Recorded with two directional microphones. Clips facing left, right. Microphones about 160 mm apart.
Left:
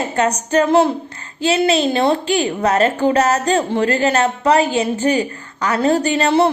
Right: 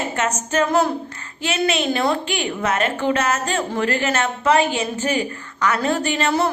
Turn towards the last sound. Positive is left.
turn(degrees=30)  # may be behind; listen again after turning